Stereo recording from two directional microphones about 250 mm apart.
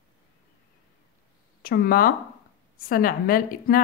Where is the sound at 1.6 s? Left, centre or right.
Left.